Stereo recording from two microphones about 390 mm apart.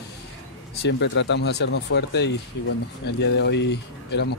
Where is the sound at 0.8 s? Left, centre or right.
Left.